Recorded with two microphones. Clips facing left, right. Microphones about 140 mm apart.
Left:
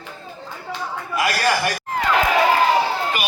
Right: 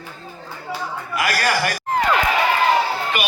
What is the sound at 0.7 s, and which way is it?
Chatter, 5° right (ahead or behind).